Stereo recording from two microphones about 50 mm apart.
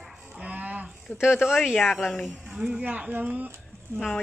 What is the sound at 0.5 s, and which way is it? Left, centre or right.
Livestock, right.